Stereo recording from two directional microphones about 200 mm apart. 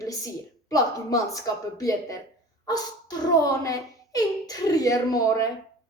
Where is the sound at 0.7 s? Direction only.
15° left (ahead or behind).